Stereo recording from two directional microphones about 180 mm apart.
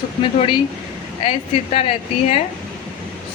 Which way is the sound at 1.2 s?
35° left (ahead or behind).